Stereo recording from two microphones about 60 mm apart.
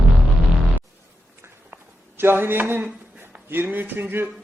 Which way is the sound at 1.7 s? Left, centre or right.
Right.